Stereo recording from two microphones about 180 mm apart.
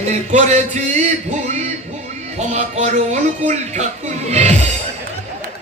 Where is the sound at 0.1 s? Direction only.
40° right (ahead or behind).